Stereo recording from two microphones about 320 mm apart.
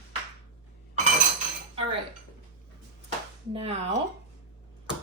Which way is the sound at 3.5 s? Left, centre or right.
Centre.